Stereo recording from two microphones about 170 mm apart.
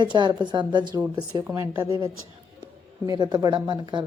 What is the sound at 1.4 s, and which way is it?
A woman's voice, 15° right (ahead or behind).